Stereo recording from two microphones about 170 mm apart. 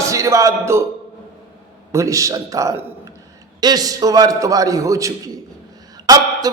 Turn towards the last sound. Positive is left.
turn(degrees=-25)  # may be behind; listen again after turning